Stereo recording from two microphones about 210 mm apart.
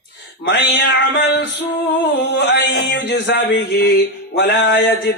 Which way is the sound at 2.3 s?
55° left (ahead or behind).